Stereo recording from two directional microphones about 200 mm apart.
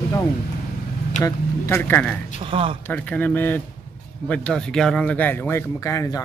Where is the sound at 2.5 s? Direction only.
25° right (ahead or behind).